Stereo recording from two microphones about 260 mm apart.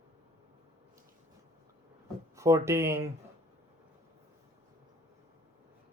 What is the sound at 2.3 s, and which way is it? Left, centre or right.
Speech, centre.